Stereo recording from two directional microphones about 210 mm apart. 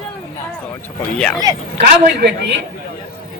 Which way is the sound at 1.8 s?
50° right (ahead or behind).